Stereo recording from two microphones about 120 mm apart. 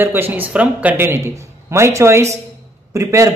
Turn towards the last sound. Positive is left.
turn(degrees=-25)  # may be behind; listen again after turning